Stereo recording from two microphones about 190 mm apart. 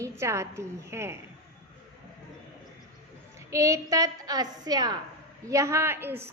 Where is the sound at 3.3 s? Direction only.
15° right (ahead or behind).